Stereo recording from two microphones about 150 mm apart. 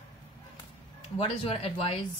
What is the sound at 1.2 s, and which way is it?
Speech, 40° left (ahead or behind).